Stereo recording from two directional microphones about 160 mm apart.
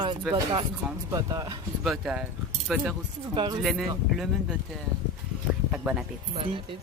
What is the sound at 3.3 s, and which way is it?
Speech, 30° right (ahead or behind).